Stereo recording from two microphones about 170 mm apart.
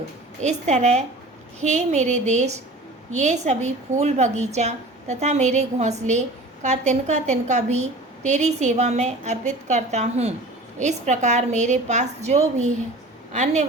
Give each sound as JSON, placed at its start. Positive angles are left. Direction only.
{"t": 0.4, "sound": "a woman's voice", "side_deg": -40}